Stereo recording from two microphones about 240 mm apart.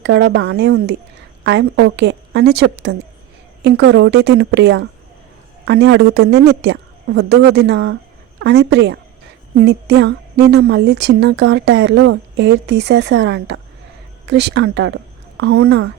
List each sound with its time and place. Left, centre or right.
0.0 s a woman's voice: right